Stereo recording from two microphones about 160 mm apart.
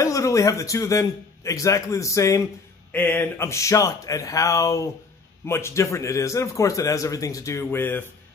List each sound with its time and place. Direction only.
0.0 s speech: 20° left (ahead or behind)